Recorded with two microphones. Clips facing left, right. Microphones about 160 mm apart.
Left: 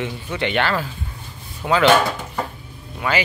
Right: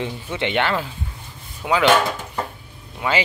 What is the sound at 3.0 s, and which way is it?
Speech, 20° right (ahead or behind).